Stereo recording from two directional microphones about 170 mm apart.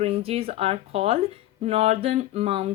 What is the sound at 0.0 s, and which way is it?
Speech, 35° right (ahead or behind).